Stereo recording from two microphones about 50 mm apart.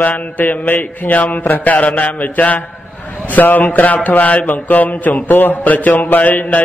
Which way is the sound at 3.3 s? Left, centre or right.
Left.